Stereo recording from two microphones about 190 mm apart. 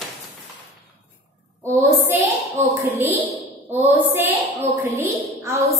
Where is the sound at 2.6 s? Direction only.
35° right (ahead or behind).